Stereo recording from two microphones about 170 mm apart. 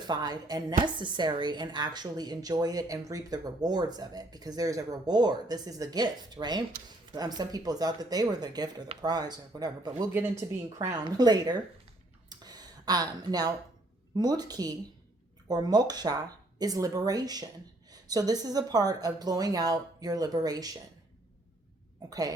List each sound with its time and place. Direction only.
0.1 s a woman's voice: 25° right (ahead or behind)
12.3 s a sound: 25° right (ahead or behind)
14.2 s a woman's voice: 25° right (ahead or behind)
22.1 s a woman's voice: 20° right (ahead or behind)